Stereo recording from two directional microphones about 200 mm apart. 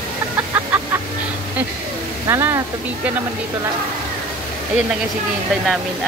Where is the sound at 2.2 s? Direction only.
15° right (ahead or behind).